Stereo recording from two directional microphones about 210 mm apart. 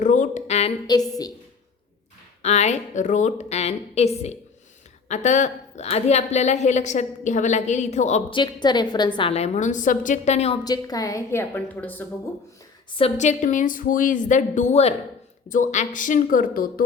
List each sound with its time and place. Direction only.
0.0 s a sound: 35° left (ahead or behind)
0.9 s a woman's voice: 15° left (ahead or behind)
2.4 s a woman's voice: 30° left (ahead or behind)
8.4 s a woman's voice: 20° left (ahead or behind)
10.6 s a woman's voice: 20° left (ahead or behind)
13.0 s a woman's voice: 30° left (ahead or behind)